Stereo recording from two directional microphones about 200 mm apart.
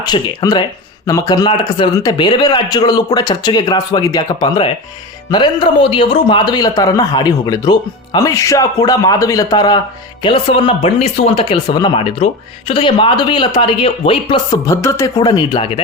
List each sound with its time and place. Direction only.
0.0 s speech: 20° left (ahead or behind)
14.7 s speech: 15° left (ahead or behind)